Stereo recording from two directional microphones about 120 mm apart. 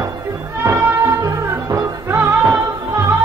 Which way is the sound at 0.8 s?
25° right (ahead or behind).